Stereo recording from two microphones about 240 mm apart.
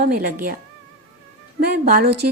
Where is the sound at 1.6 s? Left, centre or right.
Right.